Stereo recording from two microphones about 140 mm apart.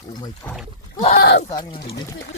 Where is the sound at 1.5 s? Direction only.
30° left (ahead or behind).